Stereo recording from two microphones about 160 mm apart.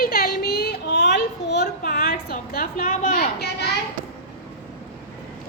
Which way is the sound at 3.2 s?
90° left.